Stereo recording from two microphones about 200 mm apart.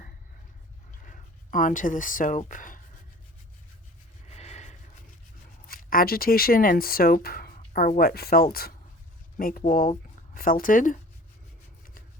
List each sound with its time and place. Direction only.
1.0 s speech: 40° left (ahead or behind)
4.3 s a sound: 35° left (ahead or behind)
5.6 s speech: 45° left (ahead or behind)